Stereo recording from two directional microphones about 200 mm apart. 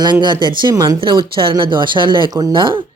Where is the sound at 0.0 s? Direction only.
20° right (ahead or behind).